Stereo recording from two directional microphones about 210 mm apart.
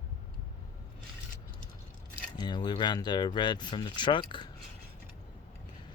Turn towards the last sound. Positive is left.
turn(degrees=20)  # may be behind; listen again after turning